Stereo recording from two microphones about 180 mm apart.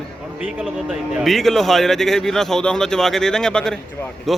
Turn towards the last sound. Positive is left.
turn(degrees=0)  # may be behind; listen again after turning